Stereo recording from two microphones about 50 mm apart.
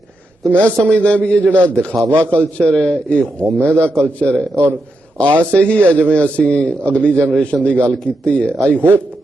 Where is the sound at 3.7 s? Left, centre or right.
Left.